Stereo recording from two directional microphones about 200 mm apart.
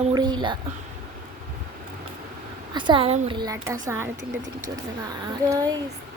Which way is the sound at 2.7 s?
25° right (ahead or behind).